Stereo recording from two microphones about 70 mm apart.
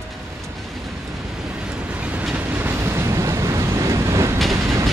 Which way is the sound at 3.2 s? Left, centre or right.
Right.